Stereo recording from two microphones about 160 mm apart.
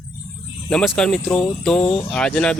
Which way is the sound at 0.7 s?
5° left (ahead or behind).